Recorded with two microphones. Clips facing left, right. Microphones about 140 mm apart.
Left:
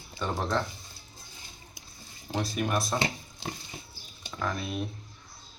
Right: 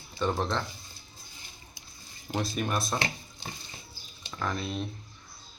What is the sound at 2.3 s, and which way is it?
Speech, centre (ahead or behind).